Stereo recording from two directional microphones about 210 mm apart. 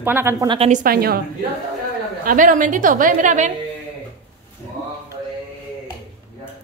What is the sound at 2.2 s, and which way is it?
A woman's voice, 40° right (ahead or behind).